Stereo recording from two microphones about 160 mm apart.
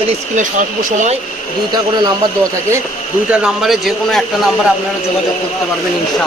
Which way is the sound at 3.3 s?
5° right (ahead or behind).